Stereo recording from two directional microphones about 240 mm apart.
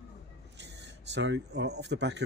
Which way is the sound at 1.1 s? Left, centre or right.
Right.